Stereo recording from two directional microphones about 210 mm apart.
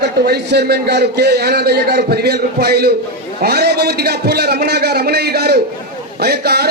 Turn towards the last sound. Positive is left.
turn(degrees=-50)  # may be behind; listen again after turning